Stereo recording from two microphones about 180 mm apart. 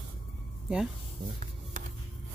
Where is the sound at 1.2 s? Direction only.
45° right (ahead or behind).